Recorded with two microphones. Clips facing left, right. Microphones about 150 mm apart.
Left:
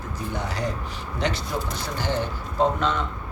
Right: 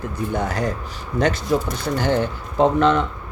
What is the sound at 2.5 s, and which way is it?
Speech, 65° right (ahead or behind).